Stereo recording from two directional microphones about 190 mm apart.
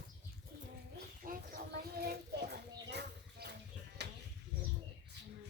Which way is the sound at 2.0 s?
55° right (ahead or behind).